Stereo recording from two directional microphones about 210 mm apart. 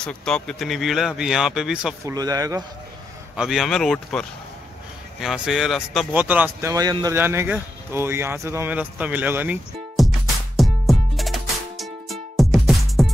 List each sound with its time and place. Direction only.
0.0 s speech: 5° left (ahead or behind)
2.0 s speech: 15° right (ahead or behind)
3.3 s speech: centre (ahead or behind)
5.2 s a sound: centre (ahead or behind)